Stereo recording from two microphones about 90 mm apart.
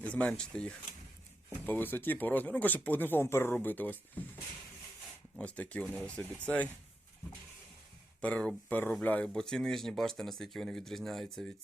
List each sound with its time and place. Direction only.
0.0 s speech: 10° left (ahead or behind)
1.6 s speech: 20° left (ahead or behind)
5.4 s speech: 15° left (ahead or behind)
8.2 s speech: 10° left (ahead or behind)